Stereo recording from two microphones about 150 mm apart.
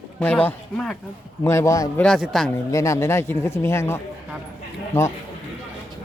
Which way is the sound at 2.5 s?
20° left (ahead or behind).